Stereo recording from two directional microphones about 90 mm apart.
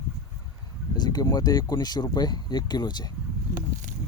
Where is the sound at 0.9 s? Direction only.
50° left (ahead or behind).